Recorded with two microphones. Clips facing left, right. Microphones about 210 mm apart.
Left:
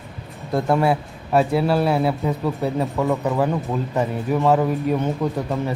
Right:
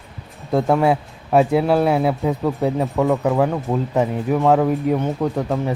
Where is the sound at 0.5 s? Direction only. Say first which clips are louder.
Right 2 dB; 15° right (ahead or behind).